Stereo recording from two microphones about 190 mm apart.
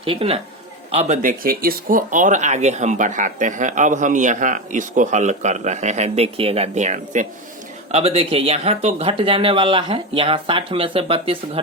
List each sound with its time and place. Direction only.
0.0 s speech: 30° right (ahead or behind)